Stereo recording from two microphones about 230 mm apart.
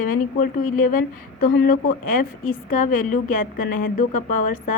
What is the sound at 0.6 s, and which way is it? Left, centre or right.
Speech, left.